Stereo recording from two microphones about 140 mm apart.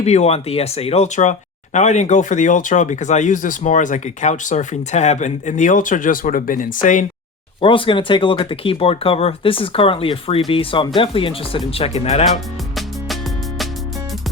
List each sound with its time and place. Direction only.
0.0 s speech: 50° left (ahead or behind); by 7.0 s 70° left (ahead or behind)
7.6 s speech: 40° left (ahead or behind)